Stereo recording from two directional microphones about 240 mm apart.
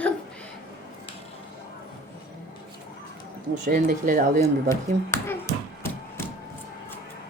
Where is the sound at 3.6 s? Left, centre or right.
Right.